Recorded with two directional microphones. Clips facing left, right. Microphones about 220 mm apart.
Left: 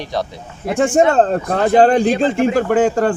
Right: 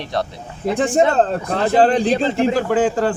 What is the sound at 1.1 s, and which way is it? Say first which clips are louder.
A man's voice: left 3 dB; 45° left (ahead or behind).